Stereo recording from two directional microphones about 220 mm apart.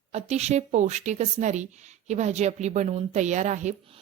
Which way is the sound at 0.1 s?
30° right (ahead or behind).